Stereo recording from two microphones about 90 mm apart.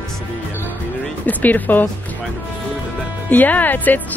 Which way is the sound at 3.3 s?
20° left (ahead or behind).